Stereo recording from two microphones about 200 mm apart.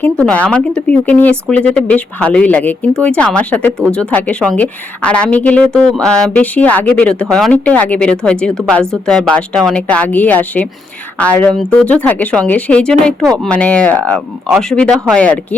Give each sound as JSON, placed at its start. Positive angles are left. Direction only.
{"t": 0.0, "sound": "a woman's voice", "side_deg": 5}